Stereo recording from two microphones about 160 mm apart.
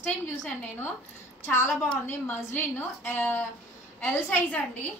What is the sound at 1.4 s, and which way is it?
A woman's voice, 15° left (ahead or behind).